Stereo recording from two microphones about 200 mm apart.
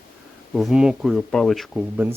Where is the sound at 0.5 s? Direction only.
Centre (ahead or behind).